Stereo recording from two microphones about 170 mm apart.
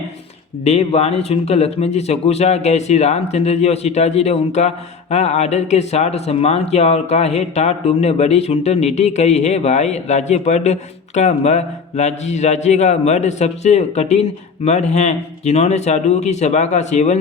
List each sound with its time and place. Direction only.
0.6 s speech: 40° left (ahead or behind)